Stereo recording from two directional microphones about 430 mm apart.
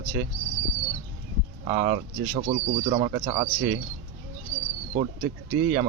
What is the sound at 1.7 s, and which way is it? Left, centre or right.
Speech, centre.